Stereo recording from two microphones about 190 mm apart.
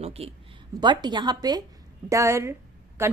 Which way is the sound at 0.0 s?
30° right (ahead or behind).